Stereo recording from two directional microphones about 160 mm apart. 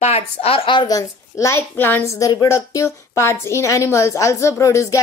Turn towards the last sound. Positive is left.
turn(degrees=20)  # may be behind; listen again after turning